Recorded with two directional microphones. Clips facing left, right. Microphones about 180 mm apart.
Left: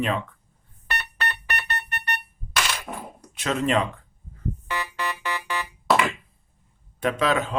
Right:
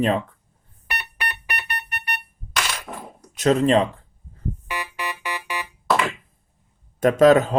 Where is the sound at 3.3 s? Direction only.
35° right (ahead or behind).